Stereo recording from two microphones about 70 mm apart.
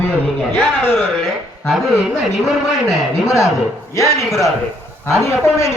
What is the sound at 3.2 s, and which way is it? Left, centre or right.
A man's voice, left.